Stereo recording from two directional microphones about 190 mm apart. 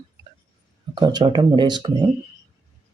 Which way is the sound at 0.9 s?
20° right (ahead or behind).